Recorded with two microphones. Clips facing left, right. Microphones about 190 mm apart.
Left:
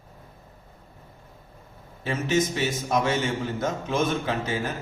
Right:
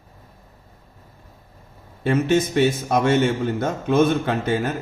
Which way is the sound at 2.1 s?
60° right (ahead or behind).